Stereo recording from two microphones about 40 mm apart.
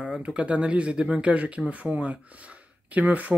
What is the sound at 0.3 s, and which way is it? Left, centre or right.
Speech, right.